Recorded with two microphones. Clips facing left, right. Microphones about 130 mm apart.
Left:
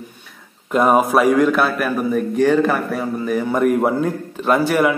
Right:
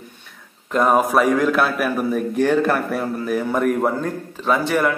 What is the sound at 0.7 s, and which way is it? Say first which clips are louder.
A man's voice: left 2 dB; 5° left (ahead or behind).